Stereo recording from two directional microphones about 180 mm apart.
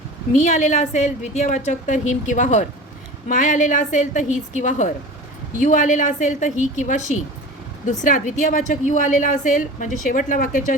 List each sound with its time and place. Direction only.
0.3 s a woman's voice: 40° left (ahead or behind)